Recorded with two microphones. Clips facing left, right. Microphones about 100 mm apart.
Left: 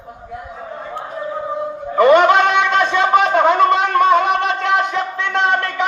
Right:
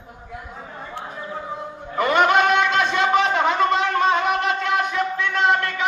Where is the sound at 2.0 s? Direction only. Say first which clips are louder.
Left 6 dB; 65° left (ahead or behind).